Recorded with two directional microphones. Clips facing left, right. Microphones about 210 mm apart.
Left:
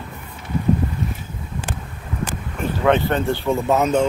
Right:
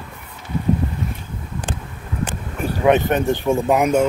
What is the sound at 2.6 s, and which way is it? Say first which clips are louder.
Speech: right 2 dB; 15° right (ahead or behind).